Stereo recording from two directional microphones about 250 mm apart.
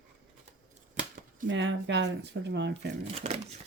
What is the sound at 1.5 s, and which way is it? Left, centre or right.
Speech, right.